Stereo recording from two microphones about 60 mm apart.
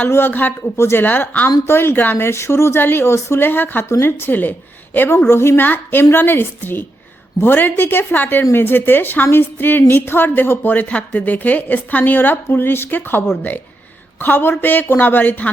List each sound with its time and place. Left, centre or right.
0.1 s a woman's voice: left
0.8 s speech: left
1.0 s speech: left
1.6 s a woman's voice: left
5.3 s speech: left
5.6 s a woman's voice: left
10.7 s a woman's voice: left